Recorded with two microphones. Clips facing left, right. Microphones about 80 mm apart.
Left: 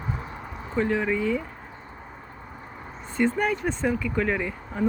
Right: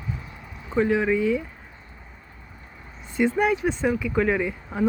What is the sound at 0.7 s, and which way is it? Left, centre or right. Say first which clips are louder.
Speech: right 3 dB; centre.